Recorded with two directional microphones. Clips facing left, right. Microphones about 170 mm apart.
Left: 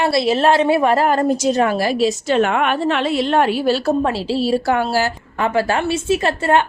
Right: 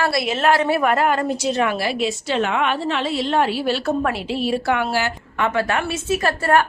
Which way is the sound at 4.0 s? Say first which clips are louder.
Left 4 dB; 30° left (ahead or behind).